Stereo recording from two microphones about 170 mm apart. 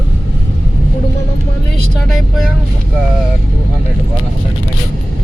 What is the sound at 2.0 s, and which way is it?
Speech, centre (ahead or behind).